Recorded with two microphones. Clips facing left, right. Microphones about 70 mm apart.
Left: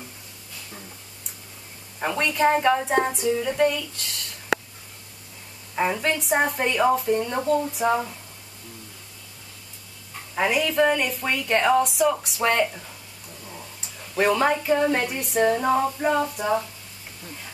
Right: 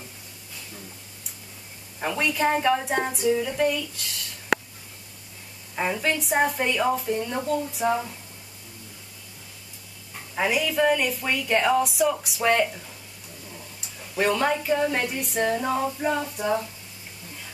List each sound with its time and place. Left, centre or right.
2.0 s a woman's voice: centre
5.8 s a woman's voice: centre
7.8 s a woman's voice: centre
10.3 s a woman's voice: centre
14.1 s a woman's voice: centre
15.5 s a woman's voice: centre